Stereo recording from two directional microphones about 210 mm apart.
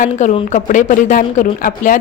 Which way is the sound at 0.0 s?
35° left (ahead or behind).